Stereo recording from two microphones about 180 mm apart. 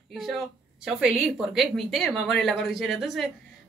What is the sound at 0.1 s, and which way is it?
A woman's voice, centre (ahead or behind).